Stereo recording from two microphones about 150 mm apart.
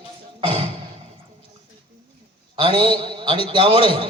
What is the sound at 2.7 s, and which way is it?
A man's voice, 35° right (ahead or behind).